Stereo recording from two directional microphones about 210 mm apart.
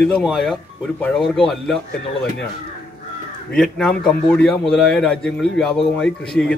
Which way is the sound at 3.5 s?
Centre (ahead or behind).